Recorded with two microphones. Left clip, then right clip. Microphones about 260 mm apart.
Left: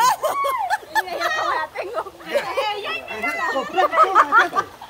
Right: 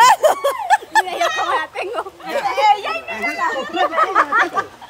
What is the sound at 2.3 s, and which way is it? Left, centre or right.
Children playing, centre.